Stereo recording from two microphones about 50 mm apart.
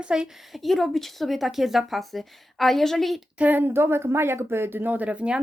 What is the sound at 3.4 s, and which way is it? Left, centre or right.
Speech, right.